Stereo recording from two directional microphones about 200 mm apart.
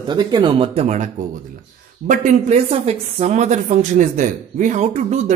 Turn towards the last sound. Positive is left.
turn(degrees=-35)  # may be behind; listen again after turning